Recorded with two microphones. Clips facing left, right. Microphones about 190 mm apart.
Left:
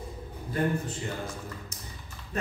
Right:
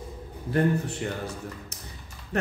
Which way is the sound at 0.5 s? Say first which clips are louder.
Right 4 dB; 65° right (ahead or behind).